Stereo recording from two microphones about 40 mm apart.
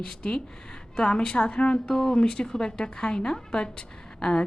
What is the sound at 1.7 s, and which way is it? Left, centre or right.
A woman's voice, centre.